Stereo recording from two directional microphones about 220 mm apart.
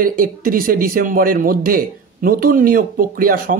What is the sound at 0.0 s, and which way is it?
A man's voice, 40° right (ahead or behind).